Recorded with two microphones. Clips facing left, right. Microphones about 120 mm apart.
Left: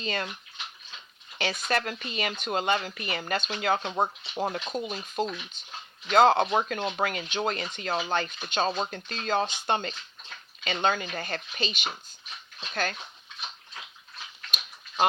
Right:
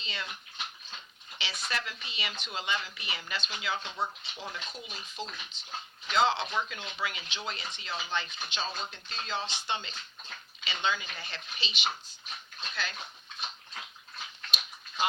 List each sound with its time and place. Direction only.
0.0 s speech: 50° left (ahead or behind)
1.4 s speech: 50° left (ahead or behind)